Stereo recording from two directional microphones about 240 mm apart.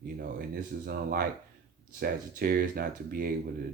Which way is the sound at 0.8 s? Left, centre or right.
Right.